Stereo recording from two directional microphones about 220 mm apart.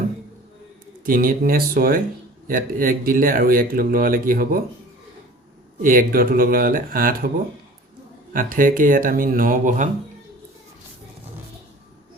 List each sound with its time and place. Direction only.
1.0 s speech: 40° right (ahead or behind)
5.8 s speech: 40° right (ahead or behind)
8.3 s speech: 40° right (ahead or behind)